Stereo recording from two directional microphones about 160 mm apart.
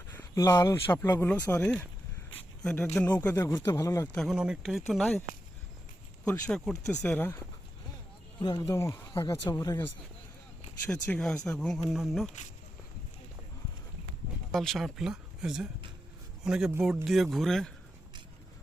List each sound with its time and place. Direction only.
0.1 s speech: 15° left (ahead or behind)
4.1 s speech: centre (ahead or behind)
6.5 s speech: 5° left (ahead or behind)
8.4 s speech: 25° left (ahead or behind)
10.9 s speech: 5° left (ahead or behind)
14.5 s speech: centre (ahead or behind)